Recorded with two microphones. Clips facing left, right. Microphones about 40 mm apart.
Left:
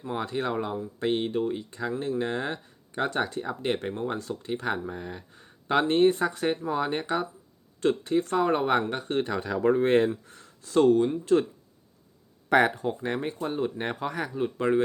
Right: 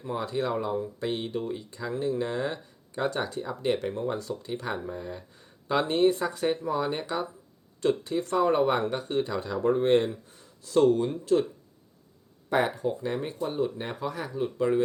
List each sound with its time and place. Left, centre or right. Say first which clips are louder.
0.1 s speech: even; left
8.9 s speech: left 1 dB; left
9.4 s speech: left 3 dB; left
10.2 s a sound: left 3 dB; left
10.6 s speech: left 1 dB; left
12.5 s speech: left 4 dB; left
13.0 s speech: left 1 dB; left
14.3 s speech: even; left